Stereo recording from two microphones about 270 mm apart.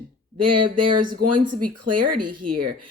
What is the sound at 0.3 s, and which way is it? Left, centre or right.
Speech, right.